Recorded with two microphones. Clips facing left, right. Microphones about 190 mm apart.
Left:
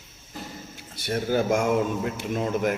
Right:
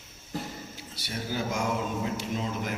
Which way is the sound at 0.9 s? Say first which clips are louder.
Left 9 dB; 55° left (ahead or behind).